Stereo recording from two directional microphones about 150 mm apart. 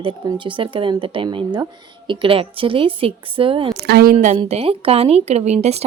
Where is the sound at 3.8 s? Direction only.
90° right.